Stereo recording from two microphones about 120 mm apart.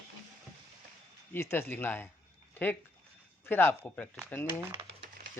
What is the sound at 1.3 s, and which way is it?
Speech, 20° left (ahead or behind).